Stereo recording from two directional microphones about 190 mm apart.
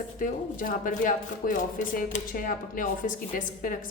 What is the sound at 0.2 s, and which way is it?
Speech, 45° left (ahead or behind).